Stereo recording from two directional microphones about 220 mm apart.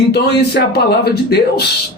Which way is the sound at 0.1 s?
45° left (ahead or behind).